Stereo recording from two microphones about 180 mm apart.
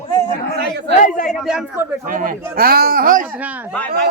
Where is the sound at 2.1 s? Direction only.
50° right (ahead or behind).